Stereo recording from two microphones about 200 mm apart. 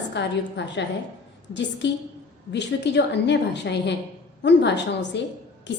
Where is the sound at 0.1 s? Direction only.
60° left (ahead or behind).